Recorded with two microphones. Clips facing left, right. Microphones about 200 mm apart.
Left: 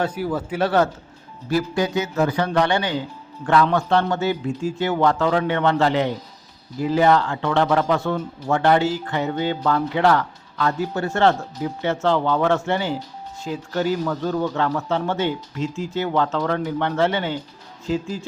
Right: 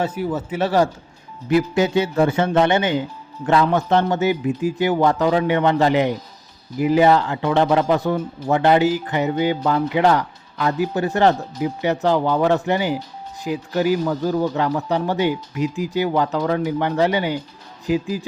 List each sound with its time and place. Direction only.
0.0 s speech: 5° right (ahead or behind)
1.5 s a man's voice: 20° right (ahead or behind)